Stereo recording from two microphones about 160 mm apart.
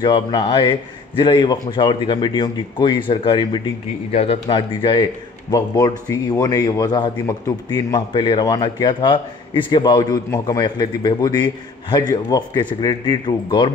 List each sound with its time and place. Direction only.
0.0 s a man's voice: 30° left (ahead or behind)
5.5 s a man's voice: 20° left (ahead or behind)